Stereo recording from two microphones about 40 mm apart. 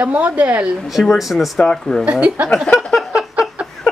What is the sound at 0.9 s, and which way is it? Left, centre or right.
Speech, centre.